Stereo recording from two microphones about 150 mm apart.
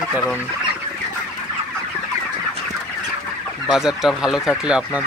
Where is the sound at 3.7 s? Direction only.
5° right (ahead or behind).